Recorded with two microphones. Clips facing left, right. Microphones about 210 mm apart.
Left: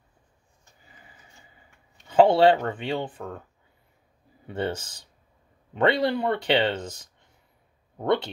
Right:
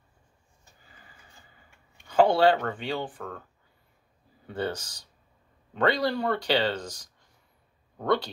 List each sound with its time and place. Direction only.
2.0 s speech: 20° left (ahead or behind)
4.5 s speech: 25° left (ahead or behind)